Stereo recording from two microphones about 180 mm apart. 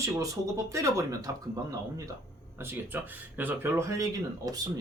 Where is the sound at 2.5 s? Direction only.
10° right (ahead or behind).